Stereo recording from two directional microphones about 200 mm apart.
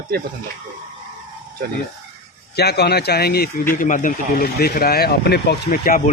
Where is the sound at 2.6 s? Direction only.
55° left (ahead or behind).